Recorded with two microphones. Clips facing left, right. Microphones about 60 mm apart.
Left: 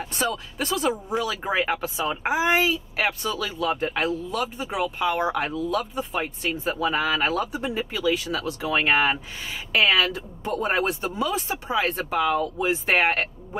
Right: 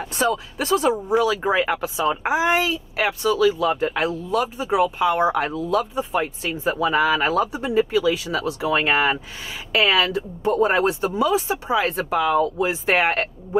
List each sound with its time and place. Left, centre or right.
0.0 s speech: centre